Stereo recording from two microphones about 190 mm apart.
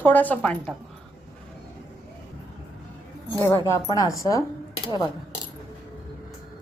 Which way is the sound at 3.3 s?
15° left (ahead or behind).